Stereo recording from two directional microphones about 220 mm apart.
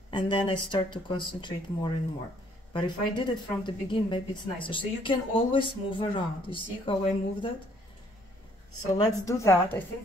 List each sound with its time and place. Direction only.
0.1 s a woman's voice: 20° left (ahead or behind)
8.9 s a woman's voice: 15° left (ahead or behind)